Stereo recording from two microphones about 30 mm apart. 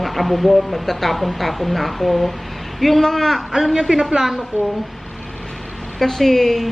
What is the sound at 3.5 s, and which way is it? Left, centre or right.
Speech, centre.